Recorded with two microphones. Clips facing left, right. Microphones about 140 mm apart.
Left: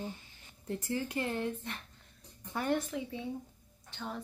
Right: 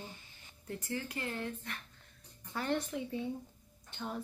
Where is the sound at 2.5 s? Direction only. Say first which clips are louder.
Left 2 dB; 10° left (ahead or behind).